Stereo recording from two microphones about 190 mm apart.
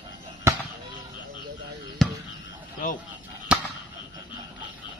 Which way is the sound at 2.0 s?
5° left (ahead or behind).